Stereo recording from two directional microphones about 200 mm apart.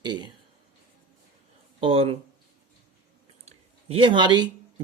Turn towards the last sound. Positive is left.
turn(degrees=-25)  # may be behind; listen again after turning